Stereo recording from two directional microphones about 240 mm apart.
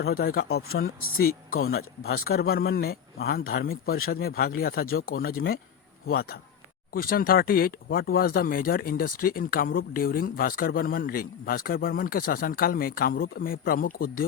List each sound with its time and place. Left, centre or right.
0.0 s speech: left
1.5 s speech: left
1.7 s speech: left